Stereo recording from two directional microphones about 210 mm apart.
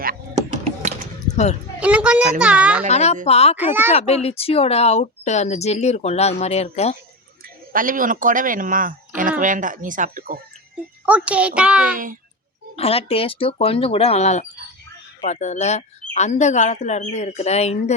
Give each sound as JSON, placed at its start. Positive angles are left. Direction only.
{"t": 0.6, "sound": "a sound", "side_deg": -35}
{"t": 1.8, "sound": "a child's voice", "side_deg": -5}
{"t": 2.9, "sound": "speech", "side_deg": 30}
{"t": 3.6, "sound": "a child's voice", "side_deg": -10}
{"t": 3.9, "sound": "speech", "side_deg": 30}
{"t": 7.4, "sound": "speech", "side_deg": -40}
{"t": 11.0, "sound": "a child's voice", "side_deg": -5}
{"t": 12.7, "sound": "speech", "side_deg": 30}